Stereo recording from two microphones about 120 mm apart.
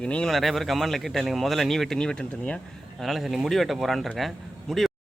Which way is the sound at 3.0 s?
Centre (ahead or behind).